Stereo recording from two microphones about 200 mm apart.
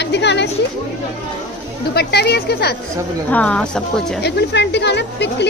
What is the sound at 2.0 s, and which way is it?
Speech, 55° left (ahead or behind).